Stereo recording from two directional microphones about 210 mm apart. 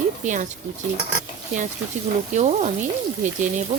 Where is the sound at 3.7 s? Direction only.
35° right (ahead or behind).